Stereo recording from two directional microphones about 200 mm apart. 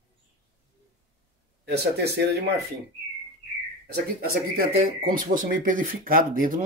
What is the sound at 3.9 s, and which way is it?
Speech, 50° right (ahead or behind).